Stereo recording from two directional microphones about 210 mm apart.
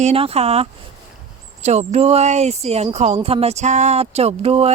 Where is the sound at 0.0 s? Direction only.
30° right (ahead or behind).